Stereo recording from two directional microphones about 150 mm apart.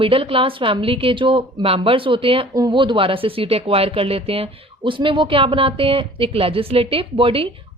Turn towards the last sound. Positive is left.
turn(degrees=-35)  # may be behind; listen again after turning